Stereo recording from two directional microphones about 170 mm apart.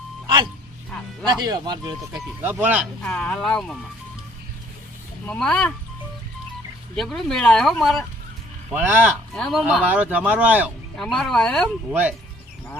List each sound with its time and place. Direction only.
1.2 s speech: 25° right (ahead or behind)
2.4 s speech: 10° right (ahead or behind)
3.0 s speech: 5° left (ahead or behind)
5.2 s speech: 5° left (ahead or behind)
6.9 s speech: 5° left (ahead or behind)
8.7 s speech: 10° right (ahead or behind)
9.3 s speech: 5° left (ahead or behind)
9.8 s speech: 10° right (ahead or behind)
11.0 s speech: centre (ahead or behind)
11.9 s speech: 10° right (ahead or behind)